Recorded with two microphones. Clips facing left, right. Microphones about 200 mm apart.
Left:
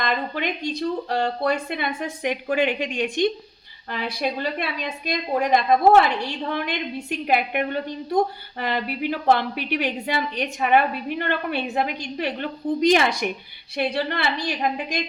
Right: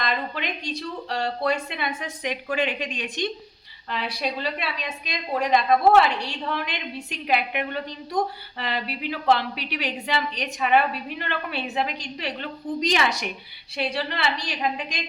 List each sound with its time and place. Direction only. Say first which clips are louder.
0.0 s a woman's voice: left 3 dB; 50° left (ahead or behind)